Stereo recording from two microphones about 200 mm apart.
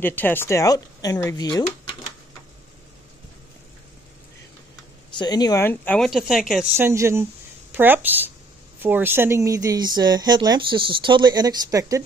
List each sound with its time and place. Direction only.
0.0 s speech: 10° left (ahead or behind)
5.1 s speech: 20° left (ahead or behind); by 12.0 s 20° right (ahead or behind)